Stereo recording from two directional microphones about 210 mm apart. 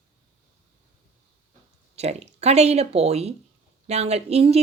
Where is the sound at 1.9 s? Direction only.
30° right (ahead or behind).